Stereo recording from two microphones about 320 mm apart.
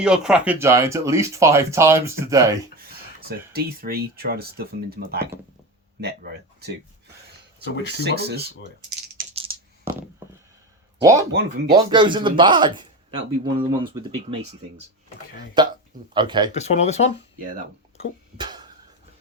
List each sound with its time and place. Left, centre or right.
0.0 s speech: centre
2.7 s speech: right
8.0 s speech: right
9.1 s a sound: centre
11.3 s speech: right
11.7 s speech: centre
15.6 s speech: centre
16.5 s speech: left
18.3 s a sound: centre